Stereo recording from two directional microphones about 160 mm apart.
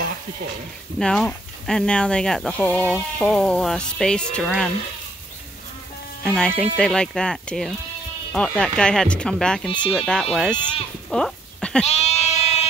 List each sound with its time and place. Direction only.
0.9 s speech: 5° left (ahead or behind)
6.2 s speech: 5° left (ahead or behind)
11.1 s a sound: 5° left (ahead or behind)
11.8 s goat: 40° left (ahead or behind)